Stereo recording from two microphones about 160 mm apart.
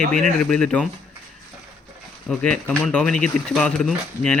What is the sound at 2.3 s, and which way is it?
Speech, 5° left (ahead or behind).